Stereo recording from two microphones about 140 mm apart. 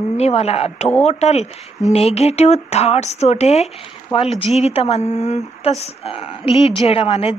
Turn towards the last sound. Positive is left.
turn(degrees=45)  # may be behind; listen again after turning